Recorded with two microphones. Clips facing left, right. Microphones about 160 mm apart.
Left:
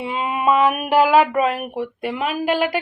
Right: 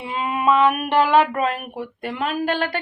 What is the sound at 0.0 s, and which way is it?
Speech, 5° left (ahead or behind).